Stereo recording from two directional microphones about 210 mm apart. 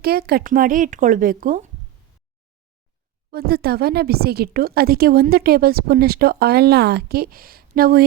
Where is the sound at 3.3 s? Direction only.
50° right (ahead or behind).